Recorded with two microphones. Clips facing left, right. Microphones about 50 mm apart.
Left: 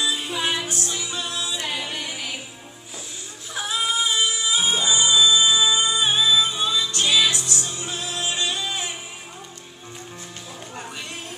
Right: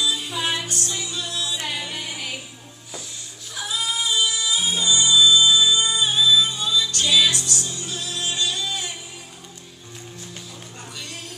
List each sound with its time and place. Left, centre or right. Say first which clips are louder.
0.0 s music: even; centre
0.4 s music: left 2 dB; centre
0.8 s music: left 1 dB; centre
1.7 s music: left 1 dB; centre
3.5 s music: left 2 dB; left
11.0 s music: left 2 dB; left